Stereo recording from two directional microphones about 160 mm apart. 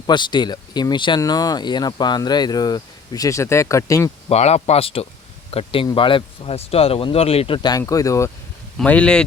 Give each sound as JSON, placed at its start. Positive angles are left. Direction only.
{"t": 0.1, "sound": "speech", "side_deg": 30}
{"t": 4.3, "sound": "speech", "side_deg": 40}
{"t": 8.8, "sound": "speech", "side_deg": 5}